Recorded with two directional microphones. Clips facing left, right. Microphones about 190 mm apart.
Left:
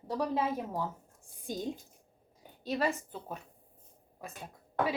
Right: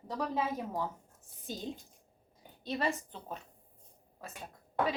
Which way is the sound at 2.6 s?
10° left (ahead or behind).